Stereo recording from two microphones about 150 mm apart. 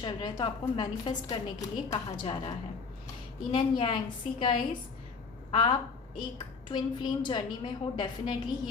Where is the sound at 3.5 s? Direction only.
35° left (ahead or behind).